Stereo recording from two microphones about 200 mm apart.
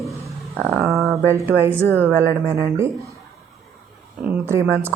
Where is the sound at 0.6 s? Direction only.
Centre (ahead or behind).